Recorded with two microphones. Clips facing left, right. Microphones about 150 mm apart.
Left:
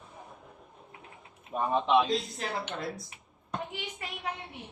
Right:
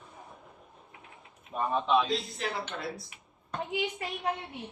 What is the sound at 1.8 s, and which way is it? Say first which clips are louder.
Speech: left 2 dB; 5° left (ahead or behind).